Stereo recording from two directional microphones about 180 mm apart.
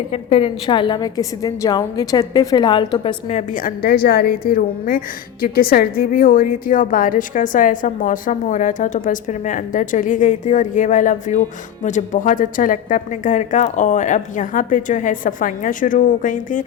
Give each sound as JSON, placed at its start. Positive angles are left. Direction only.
{"t": 0.1, "sound": "a woman's voice", "side_deg": 35}
{"t": 3.2, "sound": "a woman's voice", "side_deg": 40}